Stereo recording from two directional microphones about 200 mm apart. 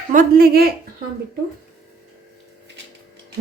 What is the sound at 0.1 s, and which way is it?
Speech, 45° right (ahead or behind).